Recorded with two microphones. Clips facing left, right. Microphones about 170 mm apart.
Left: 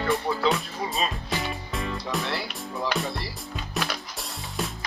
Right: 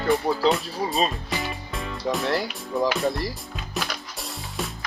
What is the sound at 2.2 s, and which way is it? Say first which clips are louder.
Speech: right 6 dB; 45° right (ahead or behind).